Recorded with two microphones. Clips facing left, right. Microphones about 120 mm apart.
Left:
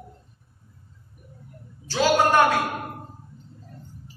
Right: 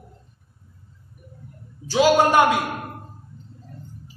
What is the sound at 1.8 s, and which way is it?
Speech, 15° right (ahead or behind).